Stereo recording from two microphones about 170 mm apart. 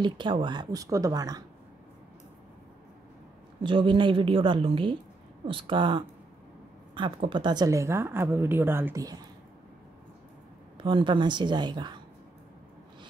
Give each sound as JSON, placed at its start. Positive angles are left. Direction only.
{"t": 0.0, "sound": "speech", "side_deg": -30}
{"t": 3.6, "sound": "a woman's voice", "side_deg": -30}
{"t": 10.8, "sound": "speech", "side_deg": -30}